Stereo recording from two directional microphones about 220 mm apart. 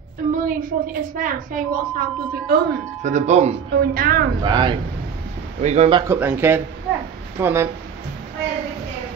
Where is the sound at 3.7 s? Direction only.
45° right (ahead or behind).